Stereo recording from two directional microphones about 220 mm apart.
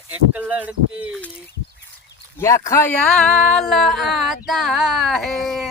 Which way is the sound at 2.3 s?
15° left (ahead or behind).